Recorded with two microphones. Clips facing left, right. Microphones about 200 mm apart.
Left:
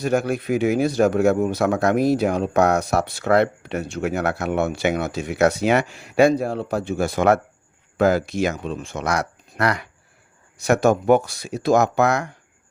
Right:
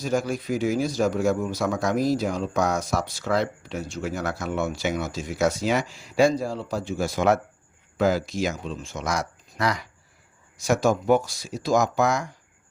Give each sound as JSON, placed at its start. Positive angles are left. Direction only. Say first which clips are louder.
{"t": 0.0, "sound": "speech", "louder": "left 4 dB", "side_deg": 65}